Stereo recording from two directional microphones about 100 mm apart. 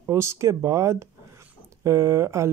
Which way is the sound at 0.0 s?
25° right (ahead or behind).